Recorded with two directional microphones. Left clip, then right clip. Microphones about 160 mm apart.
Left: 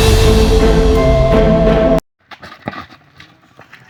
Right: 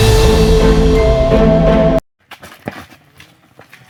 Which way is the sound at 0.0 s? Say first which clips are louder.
Right 1 dB; centre (ahead or behind).